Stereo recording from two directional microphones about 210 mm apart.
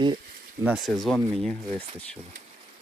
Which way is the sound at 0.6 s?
Centre (ahead or behind).